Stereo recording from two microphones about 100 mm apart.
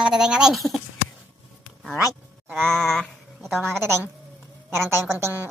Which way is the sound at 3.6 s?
25° right (ahead or behind).